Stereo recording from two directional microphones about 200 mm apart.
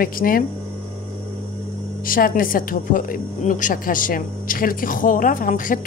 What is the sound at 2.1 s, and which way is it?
Speech, 45° left (ahead or behind).